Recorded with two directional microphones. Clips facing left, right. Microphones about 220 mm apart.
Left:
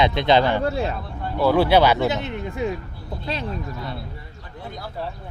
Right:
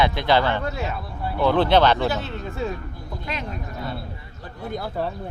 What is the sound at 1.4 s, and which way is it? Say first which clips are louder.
Speech: left 1 dB; 10° left (ahead or behind).